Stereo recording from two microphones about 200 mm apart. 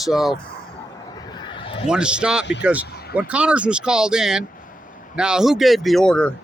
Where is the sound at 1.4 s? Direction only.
25° left (ahead or behind).